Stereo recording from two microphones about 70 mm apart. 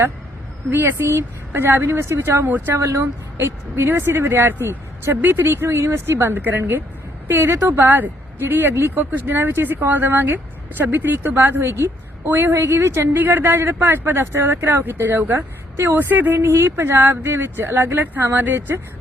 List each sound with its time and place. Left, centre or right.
0.7 s speech: right
16.4 s speech: right